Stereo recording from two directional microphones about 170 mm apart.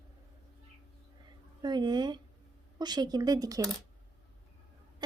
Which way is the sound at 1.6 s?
25° right (ahead or behind).